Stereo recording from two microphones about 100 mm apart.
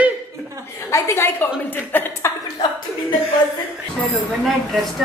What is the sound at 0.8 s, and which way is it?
Speech, 30° left (ahead or behind).